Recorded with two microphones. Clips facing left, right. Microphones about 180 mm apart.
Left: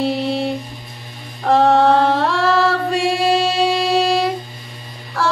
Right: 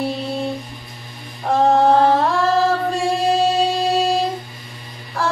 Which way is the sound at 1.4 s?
75° left (ahead or behind).